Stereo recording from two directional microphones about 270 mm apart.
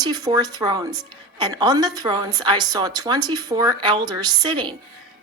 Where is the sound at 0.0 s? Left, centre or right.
Centre.